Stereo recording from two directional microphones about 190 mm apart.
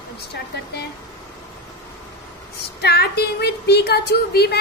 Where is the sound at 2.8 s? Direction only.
60° left (ahead or behind).